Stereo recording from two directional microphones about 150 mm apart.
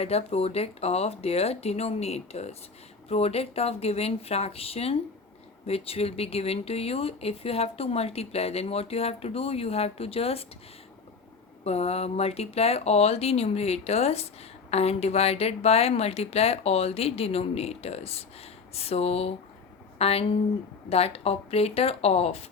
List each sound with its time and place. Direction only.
0.0 s a woman's voice: 40° left (ahead or behind)
11.6 s a woman's voice: 45° left (ahead or behind)